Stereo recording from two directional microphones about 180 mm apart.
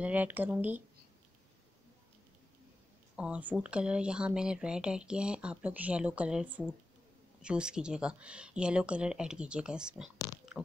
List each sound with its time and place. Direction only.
0.0 s speech: 10° right (ahead or behind)
3.2 s speech: 5° right (ahead or behind)
10.5 s a sound: centre (ahead or behind)